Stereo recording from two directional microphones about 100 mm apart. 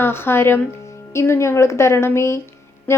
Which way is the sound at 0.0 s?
25° left (ahead or behind).